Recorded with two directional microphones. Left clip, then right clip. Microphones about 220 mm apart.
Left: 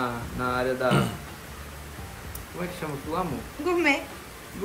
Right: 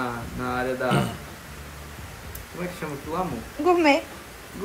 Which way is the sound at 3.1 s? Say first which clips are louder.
Right 2 dB; centre (ahead or behind).